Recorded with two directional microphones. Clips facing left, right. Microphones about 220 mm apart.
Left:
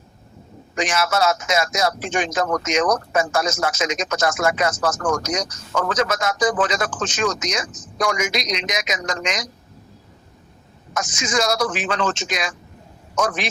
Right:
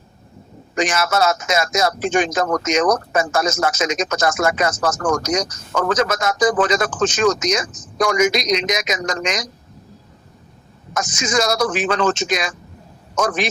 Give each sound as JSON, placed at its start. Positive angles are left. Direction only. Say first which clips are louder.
{"t": 0.8, "sound": "speech", "louder": "right 2 dB", "side_deg": -45}
{"t": 10.9, "sound": "speech", "louder": "right 3 dB", "side_deg": -45}